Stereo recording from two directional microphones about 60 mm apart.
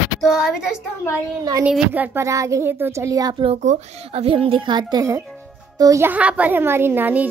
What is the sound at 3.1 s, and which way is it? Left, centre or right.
Speech, right.